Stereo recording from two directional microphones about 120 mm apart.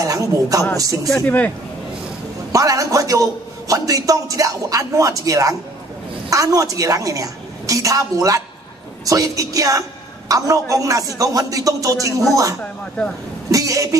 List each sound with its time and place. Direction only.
0.0 s a man's voice: 30° right (ahead or behind)
1.2 s speech: 15° left (ahead or behind)
2.5 s a man's voice: 30° right (ahead or behind)
13.5 s a sound: 30° right (ahead or behind)